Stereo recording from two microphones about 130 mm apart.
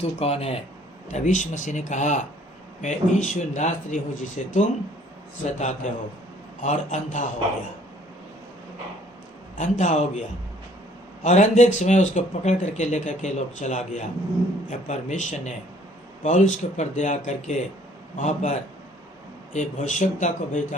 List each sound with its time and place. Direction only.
0.0 s speech: 50° left (ahead or behind)
1.1 s speech: 70° left (ahead or behind)
9.6 s speech: 70° left (ahead or behind)
19.5 s speech: 70° left (ahead or behind)